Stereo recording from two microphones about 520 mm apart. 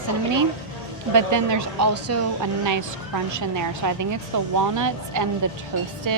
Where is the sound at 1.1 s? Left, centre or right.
Right.